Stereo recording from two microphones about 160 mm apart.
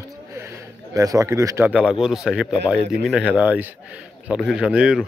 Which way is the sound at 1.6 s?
5° right (ahead or behind).